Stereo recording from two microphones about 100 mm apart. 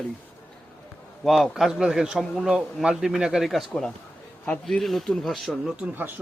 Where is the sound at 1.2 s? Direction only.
Centre (ahead or behind).